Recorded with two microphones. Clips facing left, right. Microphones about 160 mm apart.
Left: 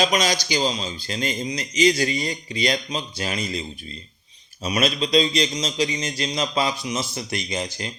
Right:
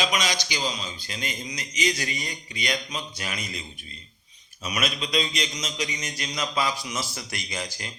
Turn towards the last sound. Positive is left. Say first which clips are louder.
# left 6 dB
turn(degrees=25)  # may be behind; listen again after turning